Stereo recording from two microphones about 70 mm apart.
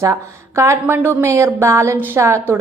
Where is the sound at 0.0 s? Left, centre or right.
Right.